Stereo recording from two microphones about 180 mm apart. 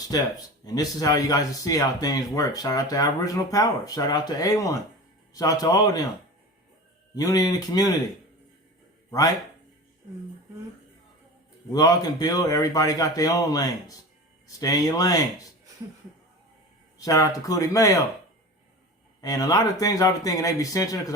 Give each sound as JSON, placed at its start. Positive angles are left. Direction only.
{"t": 0.1, "sound": "speech", "side_deg": 20}
{"t": 7.2, "sound": "speech", "side_deg": 20}
{"t": 9.0, "sound": "speech", "side_deg": 20}
{"t": 11.7, "sound": "speech", "side_deg": 20}
{"t": 17.0, "sound": "speech", "side_deg": 20}
{"t": 19.2, "sound": "speech", "side_deg": 20}